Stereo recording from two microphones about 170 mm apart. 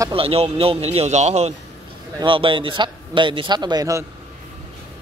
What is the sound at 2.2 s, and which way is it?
A man's voice, 30° right (ahead or behind).